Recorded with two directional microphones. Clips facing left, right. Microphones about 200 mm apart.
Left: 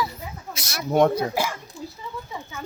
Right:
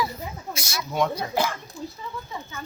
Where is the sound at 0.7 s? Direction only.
55° left (ahead or behind).